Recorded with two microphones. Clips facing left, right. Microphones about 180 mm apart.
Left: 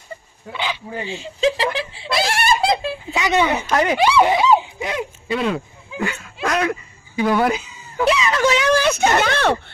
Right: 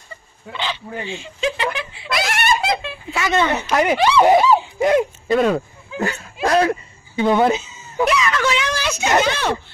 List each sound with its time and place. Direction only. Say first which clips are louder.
0.5 s speech: left 1 dB; 10° left (ahead or behind)
1.1 s speech: left 5 dB; 35° left (ahead or behind)
3.1 s speech: even; 20° left (ahead or behind)
3.7 s speech: right 2 dB; 15° right (ahead or behind)
4.7 s a sound: right 9 dB; 50° right (ahead or behind); by 8.0 s 25° right (ahead or behind)
8.1 s speech: left 3 dB; 30° left (ahead or behind)
8.4 s speech: left 5 dB; 45° left (ahead or behind)